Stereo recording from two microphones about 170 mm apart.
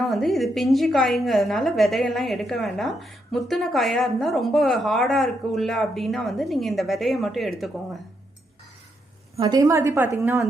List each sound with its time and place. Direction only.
0.0 s a woman's voice: centre (ahead or behind)
9.3 s a woman's voice: 25° right (ahead or behind)